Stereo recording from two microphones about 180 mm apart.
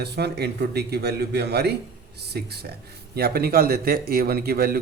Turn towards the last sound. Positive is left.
turn(degrees=-60)  # may be behind; listen again after turning